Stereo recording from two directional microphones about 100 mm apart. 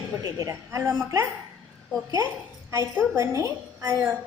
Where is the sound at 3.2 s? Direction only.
30° right (ahead or behind).